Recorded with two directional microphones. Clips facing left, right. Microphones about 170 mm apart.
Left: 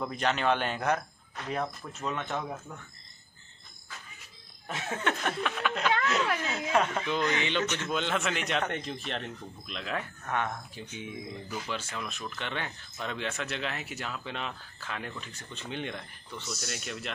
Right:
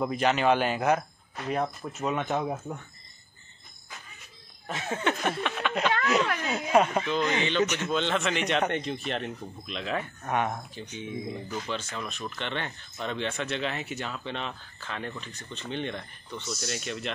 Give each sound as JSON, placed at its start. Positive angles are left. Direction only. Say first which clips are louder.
{"t": 0.0, "sound": "speech", "louder": "right 4 dB", "side_deg": -5}
{"t": 4.6, "sound": "speech", "louder": "right 3 dB", "side_deg": 0}
{"t": 6.4, "sound": "speech", "louder": "right 4 dB", "side_deg": -15}
{"t": 7.9, "sound": "speech", "louder": "right 3 dB", "side_deg": 10}
{"t": 10.2, "sound": "speech", "louder": "right 4 dB", "side_deg": -20}
{"t": 10.7, "sound": "speech", "louder": "right 4 dB", "side_deg": 10}